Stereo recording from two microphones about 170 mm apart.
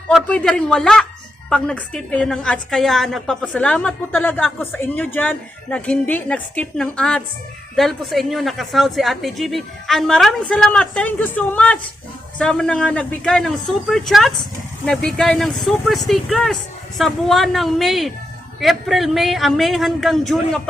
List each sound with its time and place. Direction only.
0.1 s a woman's voice: 5° left (ahead or behind)